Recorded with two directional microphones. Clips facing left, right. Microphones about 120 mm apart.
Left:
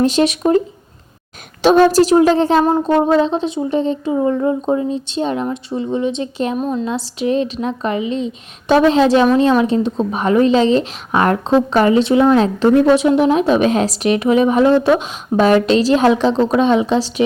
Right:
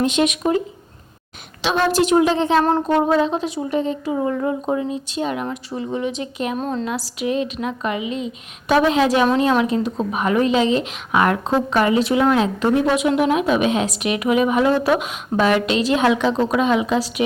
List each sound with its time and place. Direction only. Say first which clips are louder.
0.0 s speech: left 4 dB; 35° left (ahead or behind)
1.6 s speech: left 8 dB; 40° left (ahead or behind)
2.6 s speech: left 3 dB; 15° left (ahead or behind)
3.2 s speech: left 4 dB; 25° left (ahead or behind)
6.6 s speech: left 4 dB; 10° left (ahead or behind)
6.8 s speech: left 4 dB; 25° left (ahead or behind)